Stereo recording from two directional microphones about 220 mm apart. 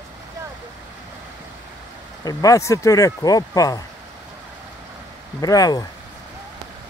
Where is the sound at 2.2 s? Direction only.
15° left (ahead or behind).